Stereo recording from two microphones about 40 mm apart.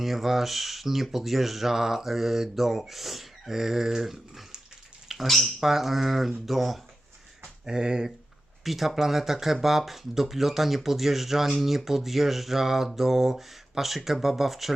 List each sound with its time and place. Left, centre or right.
0.0 s speech: centre
5.0 s a sound: centre
5.5 s speech: centre
7.6 s speech: centre
8.6 s speech: centre